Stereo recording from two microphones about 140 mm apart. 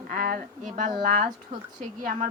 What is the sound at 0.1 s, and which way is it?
A woman's voice, 85° right.